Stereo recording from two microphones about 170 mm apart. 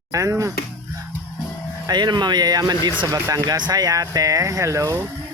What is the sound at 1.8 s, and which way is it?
Speech, 25° right (ahead or behind).